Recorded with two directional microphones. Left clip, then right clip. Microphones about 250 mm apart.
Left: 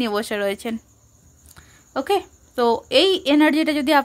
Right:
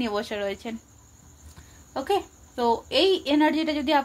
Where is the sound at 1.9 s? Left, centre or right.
Left.